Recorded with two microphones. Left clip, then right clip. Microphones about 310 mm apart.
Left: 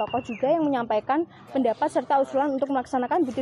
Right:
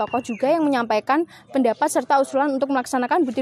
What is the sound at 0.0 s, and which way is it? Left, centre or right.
Speech, right.